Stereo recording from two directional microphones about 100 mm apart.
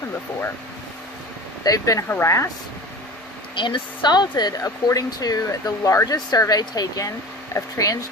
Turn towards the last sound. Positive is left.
turn(degrees=35)  # may be behind; listen again after turning